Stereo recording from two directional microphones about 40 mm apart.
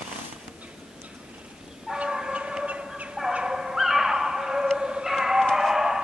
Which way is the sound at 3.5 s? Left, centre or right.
Centre.